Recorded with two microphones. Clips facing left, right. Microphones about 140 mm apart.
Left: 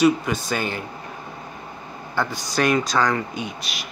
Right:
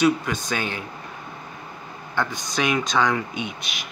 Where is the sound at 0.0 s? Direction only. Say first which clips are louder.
Left 2 dB; 10° left (ahead or behind).